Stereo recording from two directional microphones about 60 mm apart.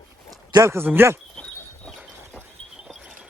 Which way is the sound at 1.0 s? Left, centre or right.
Right.